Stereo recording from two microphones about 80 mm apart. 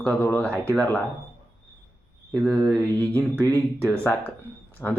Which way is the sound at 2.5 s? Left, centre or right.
Centre.